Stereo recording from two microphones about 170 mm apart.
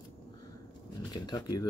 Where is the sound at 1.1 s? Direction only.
25° left (ahead or behind).